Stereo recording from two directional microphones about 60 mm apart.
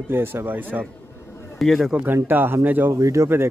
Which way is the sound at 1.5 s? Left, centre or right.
Centre.